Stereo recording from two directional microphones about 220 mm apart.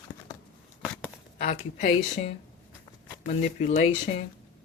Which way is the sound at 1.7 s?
35° left (ahead or behind).